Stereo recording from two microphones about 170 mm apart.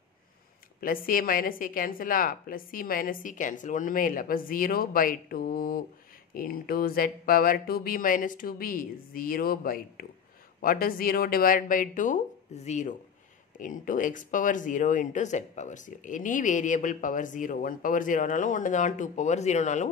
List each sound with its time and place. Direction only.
0.7 s a woman's voice: 55° left (ahead or behind)